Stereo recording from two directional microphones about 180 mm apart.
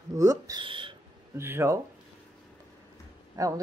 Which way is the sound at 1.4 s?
15° right (ahead or behind).